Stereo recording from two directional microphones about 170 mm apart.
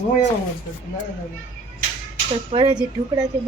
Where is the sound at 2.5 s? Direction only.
30° right (ahead or behind).